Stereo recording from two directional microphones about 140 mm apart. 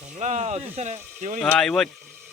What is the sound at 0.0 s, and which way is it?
Speech, 60° right (ahead or behind).